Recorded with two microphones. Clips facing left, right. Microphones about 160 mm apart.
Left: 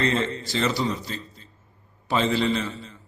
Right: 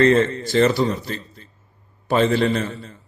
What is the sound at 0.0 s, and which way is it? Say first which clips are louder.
A man's voice: right 9 dB; 55° right (ahead or behind).